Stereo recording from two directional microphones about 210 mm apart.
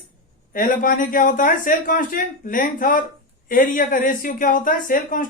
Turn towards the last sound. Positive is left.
turn(degrees=40)  # may be behind; listen again after turning